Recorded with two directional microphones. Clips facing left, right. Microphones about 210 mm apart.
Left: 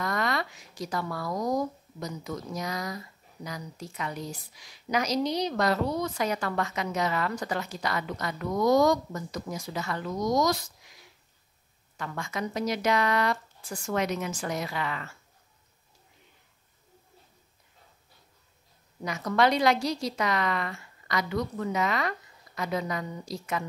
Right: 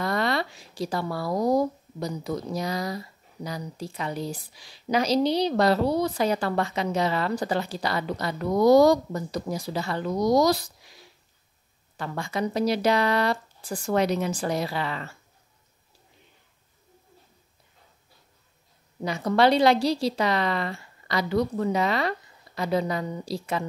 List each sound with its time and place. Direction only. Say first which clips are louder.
0.0 s speech: right 4 dB; 30° right (ahead or behind)
12.0 s speech: right 5 dB; 30° right (ahead or behind)
19.0 s speech: right 4 dB; 30° right (ahead or behind)